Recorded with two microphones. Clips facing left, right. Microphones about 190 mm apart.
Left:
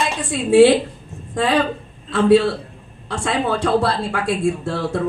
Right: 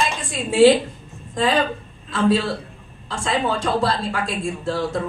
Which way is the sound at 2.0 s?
60° left (ahead or behind).